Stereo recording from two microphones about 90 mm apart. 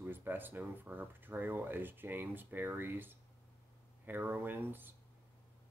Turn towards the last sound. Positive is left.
turn(degrees=-25)  # may be behind; listen again after turning